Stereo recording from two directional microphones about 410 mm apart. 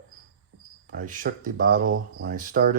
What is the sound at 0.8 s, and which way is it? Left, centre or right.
Speech, centre.